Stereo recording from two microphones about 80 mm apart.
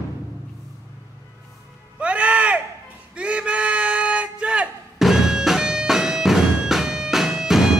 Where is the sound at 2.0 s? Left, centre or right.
Centre.